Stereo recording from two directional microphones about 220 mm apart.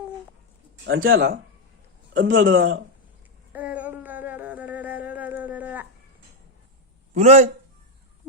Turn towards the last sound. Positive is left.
turn(degrees=-30)  # may be behind; listen again after turning